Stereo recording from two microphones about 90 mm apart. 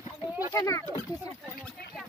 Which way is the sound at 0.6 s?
40° left (ahead or behind).